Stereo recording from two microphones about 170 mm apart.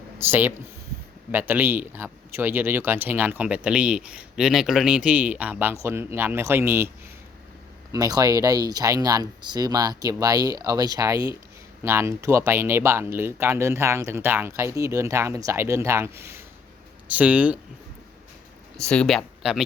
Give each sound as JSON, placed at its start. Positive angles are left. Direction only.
{"t": 0.2, "sound": "speech", "side_deg": -10}
{"t": 7.9, "sound": "speech", "side_deg": -20}
{"t": 18.8, "sound": "speech", "side_deg": 5}